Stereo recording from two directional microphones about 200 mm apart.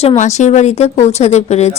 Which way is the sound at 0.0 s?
35° left (ahead or behind).